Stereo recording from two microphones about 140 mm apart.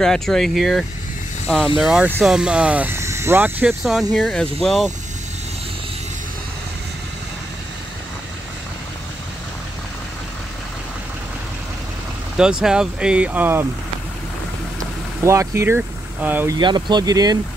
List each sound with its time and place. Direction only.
0.0 s speech: 5° left (ahead or behind)
12.4 s speech: 5° right (ahead or behind)
15.2 s speech: 20° right (ahead or behind)
16.5 s speech: 30° right (ahead or behind)